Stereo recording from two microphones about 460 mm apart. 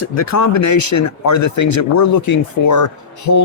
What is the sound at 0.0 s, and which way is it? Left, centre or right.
Speech, left.